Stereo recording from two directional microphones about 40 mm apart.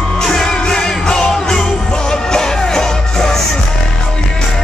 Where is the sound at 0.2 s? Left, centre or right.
Centre.